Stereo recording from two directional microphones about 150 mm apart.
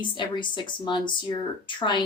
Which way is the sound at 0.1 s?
35° left (ahead or behind).